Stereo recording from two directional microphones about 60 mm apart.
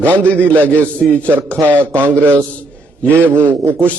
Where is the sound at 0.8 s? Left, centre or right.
Left.